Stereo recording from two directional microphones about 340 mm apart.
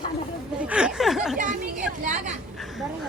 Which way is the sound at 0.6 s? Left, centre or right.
Centre.